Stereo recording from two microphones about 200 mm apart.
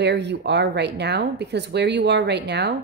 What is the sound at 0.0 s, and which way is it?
Speech, 60° right (ahead or behind).